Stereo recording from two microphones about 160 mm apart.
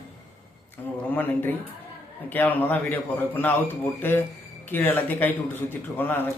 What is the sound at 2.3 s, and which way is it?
Speech, 10° left (ahead or behind).